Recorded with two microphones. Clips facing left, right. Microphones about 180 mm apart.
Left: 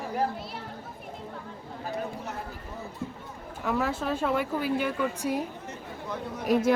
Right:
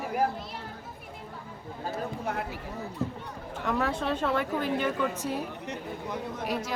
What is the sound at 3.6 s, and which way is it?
Speech, centre (ahead or behind).